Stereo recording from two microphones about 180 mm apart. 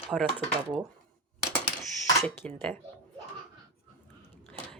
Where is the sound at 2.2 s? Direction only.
5° left (ahead or behind).